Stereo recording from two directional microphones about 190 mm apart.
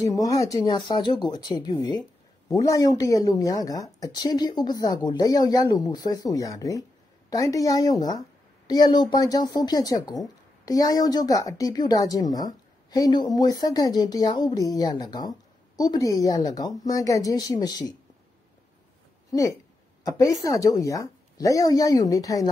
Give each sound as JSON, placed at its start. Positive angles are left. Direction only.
{"t": 0.0, "sound": "a woman's voice", "side_deg": 20}
{"t": 20.2, "sound": "a woman's voice", "side_deg": 15}